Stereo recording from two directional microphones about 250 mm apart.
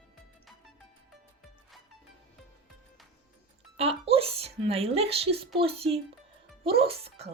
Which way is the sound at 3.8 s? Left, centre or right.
Right.